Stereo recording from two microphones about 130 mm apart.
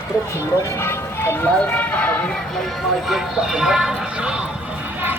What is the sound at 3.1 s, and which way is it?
Speech, 5° right (ahead or behind).